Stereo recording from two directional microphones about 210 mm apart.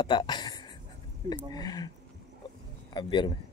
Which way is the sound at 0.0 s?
20° left (ahead or behind).